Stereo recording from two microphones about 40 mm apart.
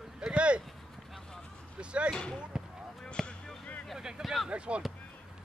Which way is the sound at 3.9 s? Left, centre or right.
Centre.